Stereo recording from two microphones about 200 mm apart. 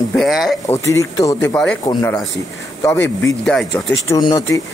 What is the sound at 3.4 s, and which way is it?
Speech, 5° left (ahead or behind).